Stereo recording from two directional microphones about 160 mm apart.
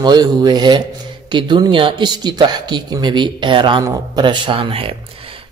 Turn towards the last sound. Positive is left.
turn(degrees=-35)  # may be behind; listen again after turning